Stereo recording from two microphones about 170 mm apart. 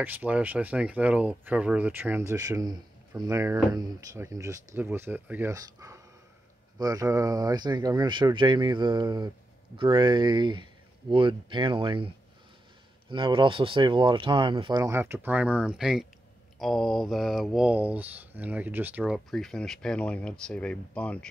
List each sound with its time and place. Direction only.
0.0 s speech: 10° right (ahead or behind); by 12.1 s 30° right (ahead or behind)
13.1 s speech: 30° right (ahead or behind)
15.0 s speech: 10° right (ahead or behind); by 21.3 s 5° left (ahead or behind)